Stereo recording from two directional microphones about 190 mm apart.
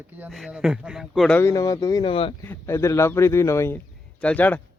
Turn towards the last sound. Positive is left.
turn(degrees=10)  # may be behind; listen again after turning